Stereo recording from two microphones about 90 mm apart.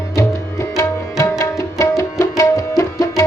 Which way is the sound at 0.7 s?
35° left (ahead or behind).